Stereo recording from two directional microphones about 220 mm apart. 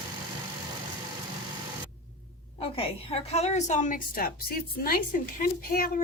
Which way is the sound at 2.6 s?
25° left (ahead or behind).